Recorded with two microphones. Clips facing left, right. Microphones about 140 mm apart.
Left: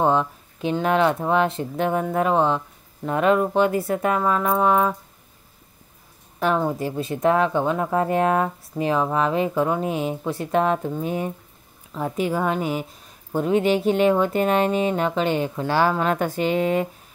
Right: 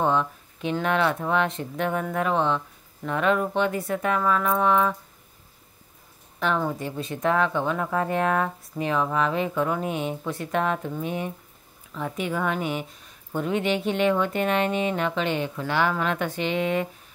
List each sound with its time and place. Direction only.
0.0 s a sound: 35° left (ahead or behind)
0.8 s speech: 35° left (ahead or behind)
6.6 s speech: 35° left (ahead or behind)